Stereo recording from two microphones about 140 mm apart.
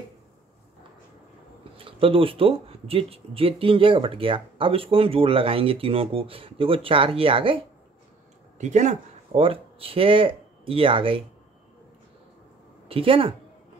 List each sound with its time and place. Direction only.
1.8 s speech: 40° right (ahead or behind)
8.5 s speech: 55° right (ahead or behind); by 11.2 s 40° right (ahead or behind)
12.8 s a woman's voice: 40° right (ahead or behind)